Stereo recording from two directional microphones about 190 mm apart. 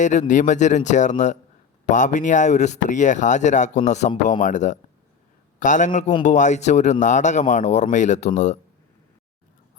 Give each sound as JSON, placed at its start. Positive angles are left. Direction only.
{"t": 0.0, "sound": "speech", "side_deg": 40}